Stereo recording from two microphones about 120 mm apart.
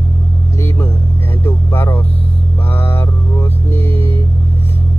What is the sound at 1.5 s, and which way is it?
Vehicle, 20° left (ahead or behind).